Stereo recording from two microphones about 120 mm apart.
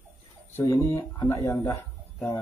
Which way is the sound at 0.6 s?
20° left (ahead or behind).